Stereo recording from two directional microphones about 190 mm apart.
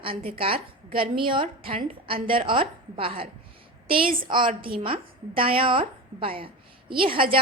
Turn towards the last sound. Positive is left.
turn(degrees=-25)  # may be behind; listen again after turning